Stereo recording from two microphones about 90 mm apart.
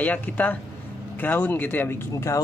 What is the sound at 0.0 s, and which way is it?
Speech, 15° left (ahead or behind).